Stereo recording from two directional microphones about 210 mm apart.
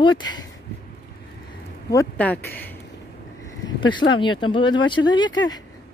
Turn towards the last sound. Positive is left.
turn(degrees=20)  # may be behind; listen again after turning